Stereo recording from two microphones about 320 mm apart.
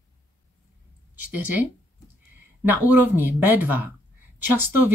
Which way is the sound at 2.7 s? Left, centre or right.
Centre.